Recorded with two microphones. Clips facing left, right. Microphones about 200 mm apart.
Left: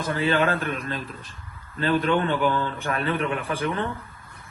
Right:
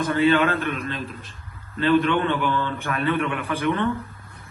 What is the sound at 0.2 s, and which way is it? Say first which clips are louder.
Speech: right 4 dB; 30° left (ahead or behind).